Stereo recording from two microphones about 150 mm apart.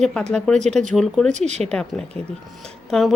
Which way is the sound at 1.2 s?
50° right (ahead or behind).